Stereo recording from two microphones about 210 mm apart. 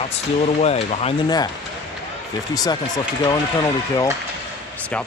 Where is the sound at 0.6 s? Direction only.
30° left (ahead or behind).